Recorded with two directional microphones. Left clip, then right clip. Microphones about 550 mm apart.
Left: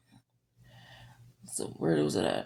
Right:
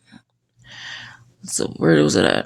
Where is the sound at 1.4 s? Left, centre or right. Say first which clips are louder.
Right 13 dB; centre.